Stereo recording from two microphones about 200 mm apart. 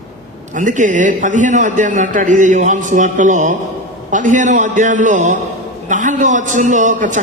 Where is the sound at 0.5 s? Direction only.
40° right (ahead or behind).